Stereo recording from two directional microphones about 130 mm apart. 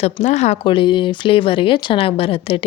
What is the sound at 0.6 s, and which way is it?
Speech, 40° left (ahead or behind).